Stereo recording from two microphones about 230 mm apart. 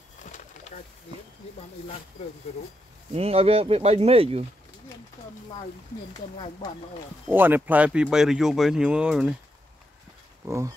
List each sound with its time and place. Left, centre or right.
0.2 s bird: left
3.2 s speech: right
6.3 s speech: left
7.2 s speech: centre
10.4 s speech: centre